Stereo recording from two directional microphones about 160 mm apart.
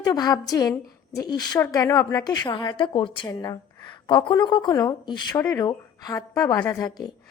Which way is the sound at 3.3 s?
20° left (ahead or behind).